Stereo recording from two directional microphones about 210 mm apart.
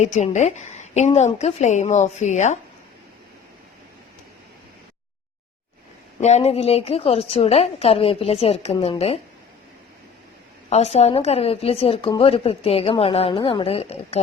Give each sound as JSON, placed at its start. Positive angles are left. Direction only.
{"t": 0.0, "sound": "a woman's voice", "side_deg": 35}
{"t": 6.1, "sound": "a woman's voice", "side_deg": 30}
{"t": 10.7, "sound": "a woman's voice", "side_deg": 30}